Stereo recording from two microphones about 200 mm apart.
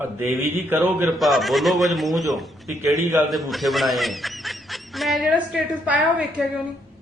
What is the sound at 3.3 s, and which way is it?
Speech, centre (ahead or behind).